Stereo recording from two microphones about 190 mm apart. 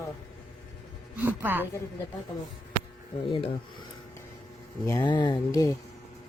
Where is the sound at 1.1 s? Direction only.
10° right (ahead or behind).